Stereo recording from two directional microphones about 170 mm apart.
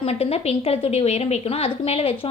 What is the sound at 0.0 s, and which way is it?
A woman's voice, 35° left (ahead or behind).